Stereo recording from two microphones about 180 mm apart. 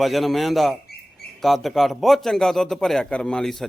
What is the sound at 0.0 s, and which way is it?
A man's voice, centre (ahead or behind).